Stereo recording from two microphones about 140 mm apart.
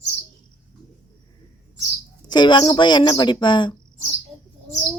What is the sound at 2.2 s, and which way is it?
A woman's voice, 30° left (ahead or behind).